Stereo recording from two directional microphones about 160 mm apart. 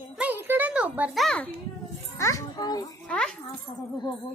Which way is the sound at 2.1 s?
20° left (ahead or behind).